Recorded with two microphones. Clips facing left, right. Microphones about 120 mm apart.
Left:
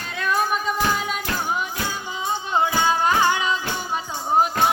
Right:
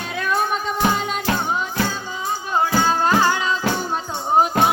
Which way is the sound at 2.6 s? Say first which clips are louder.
Right 2 dB; 15° left (ahead or behind).